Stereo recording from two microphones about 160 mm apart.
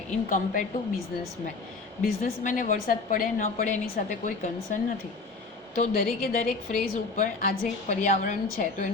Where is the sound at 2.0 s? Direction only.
60° left (ahead or behind).